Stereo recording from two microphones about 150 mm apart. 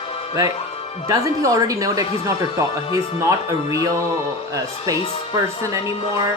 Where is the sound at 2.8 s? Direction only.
40° left (ahead or behind).